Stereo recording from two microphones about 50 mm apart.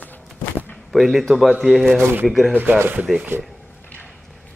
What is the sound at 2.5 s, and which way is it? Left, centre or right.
Speech, right.